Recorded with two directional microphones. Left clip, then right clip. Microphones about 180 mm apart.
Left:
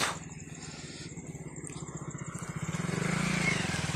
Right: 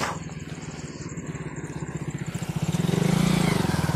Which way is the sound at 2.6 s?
40° right (ahead or behind).